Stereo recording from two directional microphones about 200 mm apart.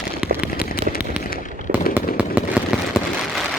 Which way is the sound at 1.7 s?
40° right (ahead or behind).